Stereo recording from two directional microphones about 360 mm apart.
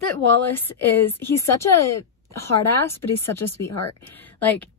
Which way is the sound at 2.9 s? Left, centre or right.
Left.